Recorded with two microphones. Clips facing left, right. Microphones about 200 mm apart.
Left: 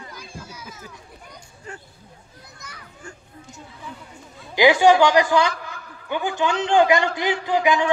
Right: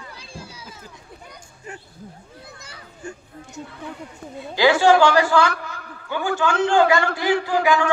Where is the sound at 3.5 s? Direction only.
65° right (ahead or behind).